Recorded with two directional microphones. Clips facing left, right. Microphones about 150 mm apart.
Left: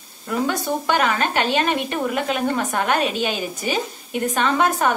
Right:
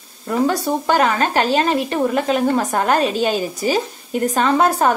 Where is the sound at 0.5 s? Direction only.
35° right (ahead or behind).